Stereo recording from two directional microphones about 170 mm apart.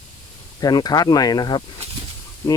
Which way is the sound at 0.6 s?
25° left (ahead or behind).